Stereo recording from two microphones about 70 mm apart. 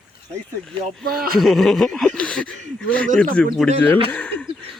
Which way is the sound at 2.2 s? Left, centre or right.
Centre.